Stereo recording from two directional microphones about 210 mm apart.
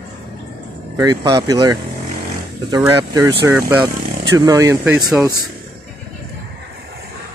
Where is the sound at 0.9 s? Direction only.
15° right (ahead or behind).